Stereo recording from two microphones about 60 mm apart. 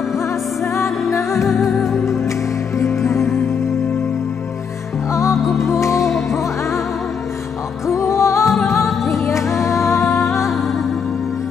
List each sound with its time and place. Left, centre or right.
0.7 s music: left
1.5 s music: centre
2.8 s music: left
5.5 s music: left
7.8 s music: left